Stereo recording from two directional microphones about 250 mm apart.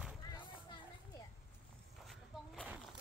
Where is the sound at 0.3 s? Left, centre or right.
Centre.